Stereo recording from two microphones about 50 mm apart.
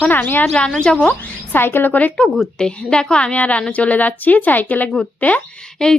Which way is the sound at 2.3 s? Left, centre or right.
Centre.